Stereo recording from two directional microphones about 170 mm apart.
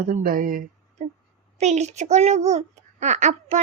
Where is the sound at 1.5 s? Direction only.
40° right (ahead or behind).